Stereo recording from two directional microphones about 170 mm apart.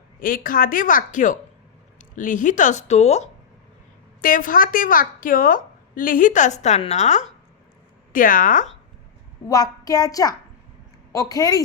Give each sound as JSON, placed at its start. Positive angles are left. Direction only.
{"t": 0.2, "sound": "a woman's voice", "side_deg": 55}
{"t": 4.2, "sound": "a woman's voice", "side_deg": 55}
{"t": 9.5, "sound": "a child's voice", "side_deg": 20}